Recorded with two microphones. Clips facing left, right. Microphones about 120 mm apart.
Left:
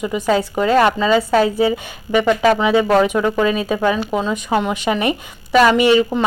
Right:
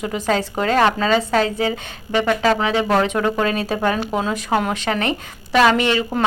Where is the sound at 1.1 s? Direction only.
10° left (ahead or behind).